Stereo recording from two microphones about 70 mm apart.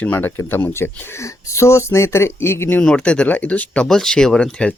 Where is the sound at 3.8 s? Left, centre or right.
Centre.